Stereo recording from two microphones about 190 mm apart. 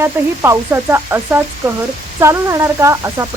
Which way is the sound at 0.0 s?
15° right (ahead or behind).